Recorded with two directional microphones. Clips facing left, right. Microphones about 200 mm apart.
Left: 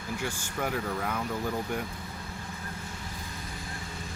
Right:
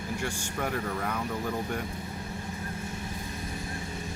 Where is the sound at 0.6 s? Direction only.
5° left (ahead or behind).